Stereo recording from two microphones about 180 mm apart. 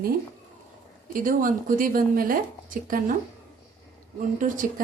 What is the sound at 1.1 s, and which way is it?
Speech, 50° right (ahead or behind).